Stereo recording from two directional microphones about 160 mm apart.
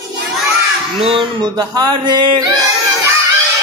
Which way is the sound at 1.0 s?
30° right (ahead or behind).